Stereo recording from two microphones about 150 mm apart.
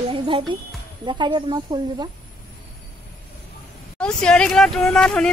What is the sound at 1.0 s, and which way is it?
Speech, 30° right (ahead or behind).